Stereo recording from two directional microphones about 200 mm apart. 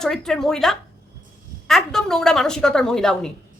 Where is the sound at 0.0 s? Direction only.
Centre (ahead or behind).